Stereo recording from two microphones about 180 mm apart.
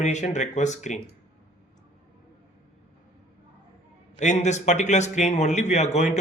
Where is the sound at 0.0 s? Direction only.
40° left (ahead or behind).